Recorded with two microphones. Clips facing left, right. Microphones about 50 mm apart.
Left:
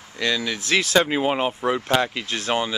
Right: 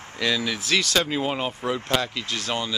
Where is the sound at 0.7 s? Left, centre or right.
Left.